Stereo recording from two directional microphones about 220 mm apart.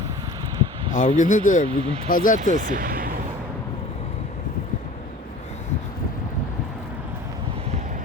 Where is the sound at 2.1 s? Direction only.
40° left (ahead or behind).